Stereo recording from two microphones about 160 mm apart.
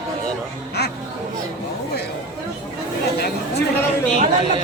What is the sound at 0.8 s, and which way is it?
Speech, 90° left.